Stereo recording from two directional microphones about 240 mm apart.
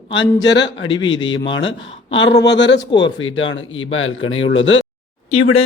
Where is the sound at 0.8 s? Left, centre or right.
Centre.